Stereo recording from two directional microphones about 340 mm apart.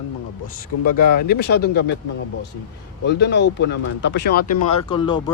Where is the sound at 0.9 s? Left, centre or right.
Left.